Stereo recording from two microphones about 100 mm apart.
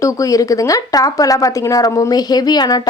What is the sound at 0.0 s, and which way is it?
Speech, 35° left (ahead or behind).